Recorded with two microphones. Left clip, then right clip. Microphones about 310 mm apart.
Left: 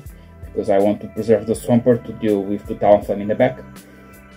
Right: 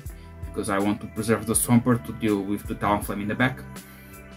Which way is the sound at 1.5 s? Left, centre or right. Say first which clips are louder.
Left 7 dB; right.